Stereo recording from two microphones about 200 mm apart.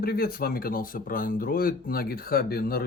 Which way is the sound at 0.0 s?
50° left (ahead or behind).